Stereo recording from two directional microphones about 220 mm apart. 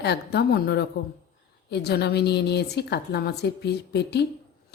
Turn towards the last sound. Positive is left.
turn(degrees=50)  # may be behind; listen again after turning